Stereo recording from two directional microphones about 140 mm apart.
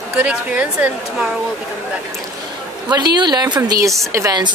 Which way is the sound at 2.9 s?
30° right (ahead or behind).